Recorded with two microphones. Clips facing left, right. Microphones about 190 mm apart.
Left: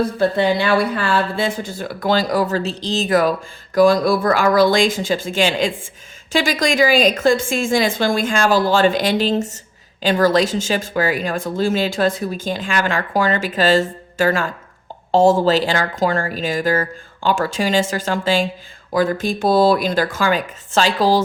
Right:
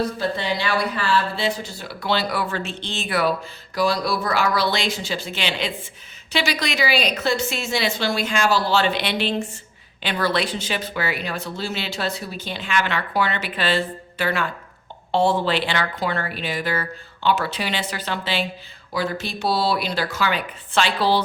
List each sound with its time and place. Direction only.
0.2 s speech: 55° left (ahead or behind)